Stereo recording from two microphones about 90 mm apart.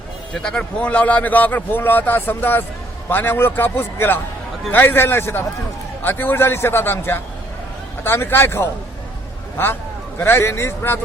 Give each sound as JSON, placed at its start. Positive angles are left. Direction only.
{"t": 0.3, "sound": "a man's voice", "side_deg": 10}
{"t": 10.2, "sound": "a man's voice", "side_deg": 25}